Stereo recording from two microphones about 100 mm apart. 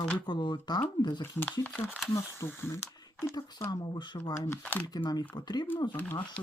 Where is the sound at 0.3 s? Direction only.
50° left (ahead or behind).